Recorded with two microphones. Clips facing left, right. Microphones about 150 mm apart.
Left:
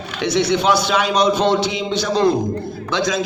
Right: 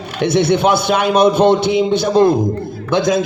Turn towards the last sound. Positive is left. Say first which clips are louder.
# right 6 dB
turn(degrees=-55)  # may be behind; listen again after turning